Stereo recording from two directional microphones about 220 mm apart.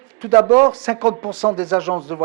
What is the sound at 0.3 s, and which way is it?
A man's voice, 10° right (ahead or behind).